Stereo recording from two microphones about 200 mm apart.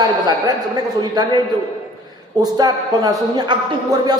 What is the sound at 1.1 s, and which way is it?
Speech, 20° right (ahead or behind).